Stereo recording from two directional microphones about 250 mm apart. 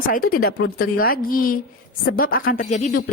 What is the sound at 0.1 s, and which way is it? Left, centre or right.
A woman's voice, left.